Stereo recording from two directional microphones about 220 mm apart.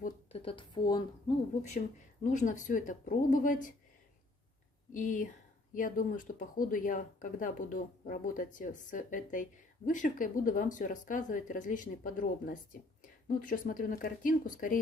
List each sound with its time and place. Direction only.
0.0 s speech: 25° left (ahead or behind)
1.5 s speech: 30° left (ahead or behind)
4.9 s speech: 35° left (ahead or behind)